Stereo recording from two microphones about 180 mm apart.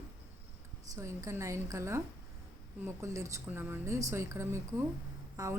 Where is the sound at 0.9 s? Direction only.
15° right (ahead or behind).